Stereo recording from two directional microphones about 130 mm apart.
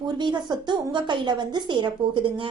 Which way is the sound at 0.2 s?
35° right (ahead or behind).